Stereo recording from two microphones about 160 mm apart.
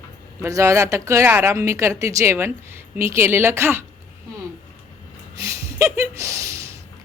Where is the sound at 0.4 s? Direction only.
20° right (ahead or behind).